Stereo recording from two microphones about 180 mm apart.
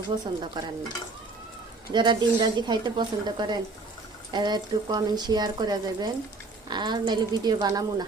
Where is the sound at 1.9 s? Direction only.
25° right (ahead or behind).